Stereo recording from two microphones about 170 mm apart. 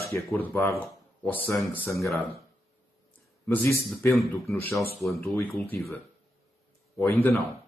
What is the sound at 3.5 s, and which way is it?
Speech, 15° left (ahead or behind).